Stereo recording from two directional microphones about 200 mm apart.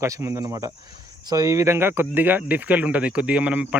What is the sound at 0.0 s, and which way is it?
Speech, 15° right (ahead or behind).